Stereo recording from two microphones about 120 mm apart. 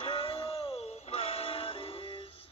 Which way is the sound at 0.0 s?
50° left (ahead or behind).